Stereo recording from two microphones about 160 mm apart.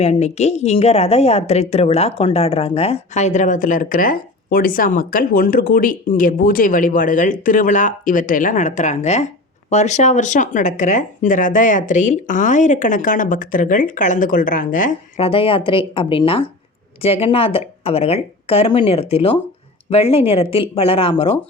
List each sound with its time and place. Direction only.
0.0 s a woman's voice: 45° left (ahead or behind)
15.2 s speech: 35° left (ahead or behind)